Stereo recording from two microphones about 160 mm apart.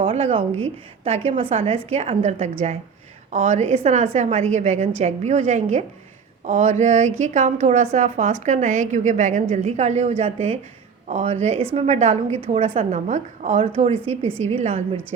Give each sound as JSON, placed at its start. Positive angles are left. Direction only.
{"t": 0.0, "sound": "a woman's voice", "side_deg": -35}